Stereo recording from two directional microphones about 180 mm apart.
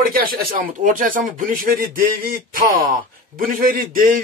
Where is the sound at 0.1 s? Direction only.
55° right (ahead or behind).